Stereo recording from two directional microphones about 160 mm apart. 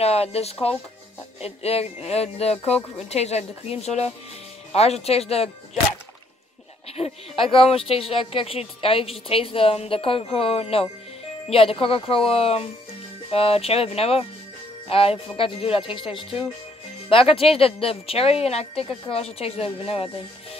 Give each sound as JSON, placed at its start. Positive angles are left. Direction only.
{"t": 0.0, "sound": "speech", "side_deg": 40}
{"t": 7.0, "sound": "speech", "side_deg": 35}